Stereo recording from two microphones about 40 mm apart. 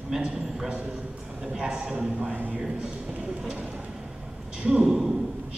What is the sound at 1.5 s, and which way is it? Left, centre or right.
A man's voice, right.